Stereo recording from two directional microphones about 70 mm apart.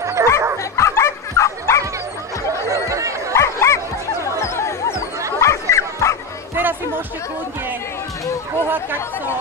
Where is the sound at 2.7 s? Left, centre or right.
Right.